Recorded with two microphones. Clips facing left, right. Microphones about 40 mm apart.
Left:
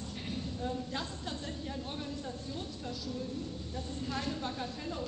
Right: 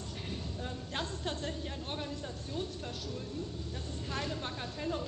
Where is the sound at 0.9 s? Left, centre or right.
Right.